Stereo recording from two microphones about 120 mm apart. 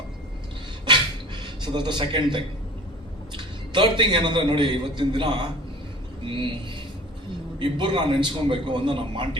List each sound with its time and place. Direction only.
1.4 s a man's voice: 40° right (ahead or behind)
7.6 s a man's voice: 40° right (ahead or behind)